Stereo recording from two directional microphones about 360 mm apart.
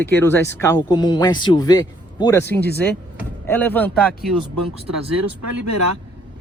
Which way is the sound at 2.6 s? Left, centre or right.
Left.